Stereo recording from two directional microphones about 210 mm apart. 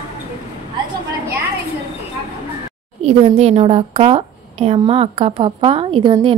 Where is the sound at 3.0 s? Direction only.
30° right (ahead or behind).